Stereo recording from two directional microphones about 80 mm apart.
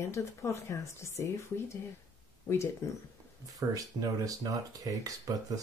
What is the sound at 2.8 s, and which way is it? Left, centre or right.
Speech, left.